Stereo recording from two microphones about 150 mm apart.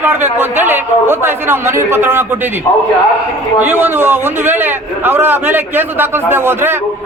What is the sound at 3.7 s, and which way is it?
A man's voice, 15° right (ahead or behind).